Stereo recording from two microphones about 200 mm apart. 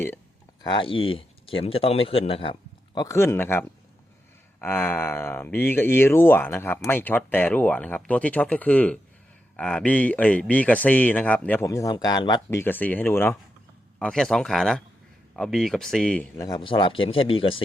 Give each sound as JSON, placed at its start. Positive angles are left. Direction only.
{"t": 0.6, "sound": "speech", "side_deg": 25}
{"t": 16.4, "sound": "speech", "side_deg": 20}